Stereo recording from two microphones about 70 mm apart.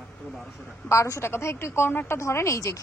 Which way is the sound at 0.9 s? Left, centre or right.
Left.